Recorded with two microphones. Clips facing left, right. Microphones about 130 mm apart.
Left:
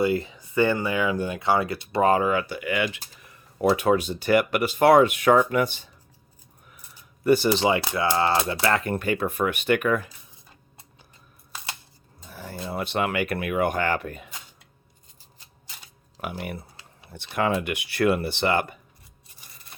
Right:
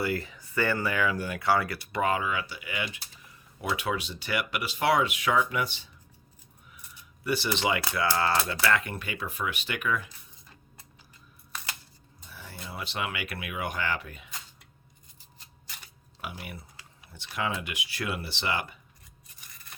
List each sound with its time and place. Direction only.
0.0 s speech: 20° left (ahead or behind)
2.0 s speech: 40° left (ahead or behind); by 3.0 s 80° left
3.2 s a sound: 60° left (ahead or behind)
3.7 s speech: 45° left (ahead or behind)
7.3 s speech: 45° left (ahead or behind)
7.6 s speech: 30° left (ahead or behind)
8.8 s speech: 45° left (ahead or behind)
11.5 s a sound: 25° left (ahead or behind)
12.3 s a sound: 50° left (ahead or behind)
12.6 s speech: 55° left (ahead or behind)
16.1 s speech: 40° left (ahead or behind)
16.4 s speech: 55° left (ahead or behind)
19.4 s a sound: 30° left (ahead or behind)